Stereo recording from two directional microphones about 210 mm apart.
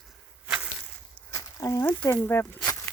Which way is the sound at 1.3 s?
15° left (ahead or behind).